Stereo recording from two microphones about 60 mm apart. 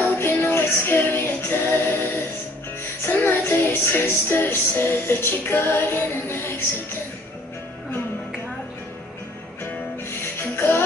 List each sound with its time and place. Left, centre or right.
0.2 s music: left
10.5 s music: left